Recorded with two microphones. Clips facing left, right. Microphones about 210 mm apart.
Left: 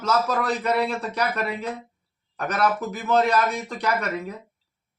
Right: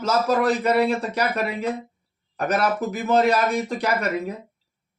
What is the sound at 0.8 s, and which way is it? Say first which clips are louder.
Speech: right 4 dB; 25° right (ahead or behind).